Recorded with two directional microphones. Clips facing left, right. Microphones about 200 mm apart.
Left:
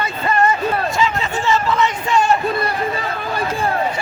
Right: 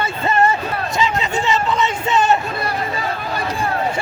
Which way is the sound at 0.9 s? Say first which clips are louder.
Even; 20° right (ahead or behind).